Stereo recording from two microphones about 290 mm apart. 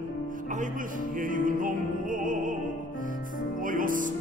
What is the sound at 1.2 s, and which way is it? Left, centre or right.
Music, right.